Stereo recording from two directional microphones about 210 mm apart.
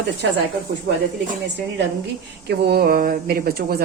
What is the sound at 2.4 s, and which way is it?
A woman's voice, 45° right (ahead or behind).